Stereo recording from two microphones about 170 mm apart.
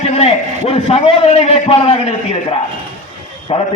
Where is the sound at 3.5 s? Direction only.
35° left (ahead or behind).